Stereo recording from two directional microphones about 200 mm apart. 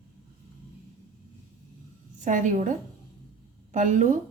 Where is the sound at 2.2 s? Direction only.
40° right (ahead or behind).